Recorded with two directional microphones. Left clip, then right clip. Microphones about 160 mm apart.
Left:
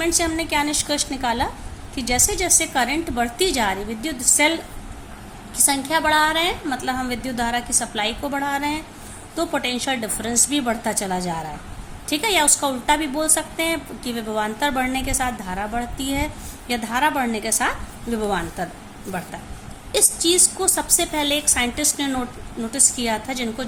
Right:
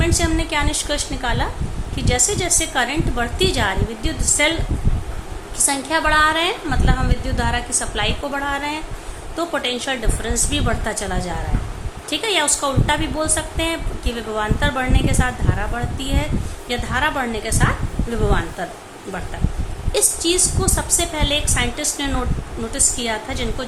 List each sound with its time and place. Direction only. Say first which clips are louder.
0.0 s a woman's voice: right 1 dB; 40° left (ahead or behind)
5.5 s a woman's voice: right 1 dB; 40° left (ahead or behind)
19.9 s a woman's voice: even; 40° left (ahead or behind)